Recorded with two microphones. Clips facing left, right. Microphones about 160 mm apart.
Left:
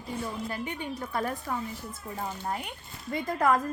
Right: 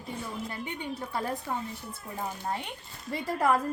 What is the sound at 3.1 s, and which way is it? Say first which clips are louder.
Speech: left 1 dB; 30° right (ahead or behind).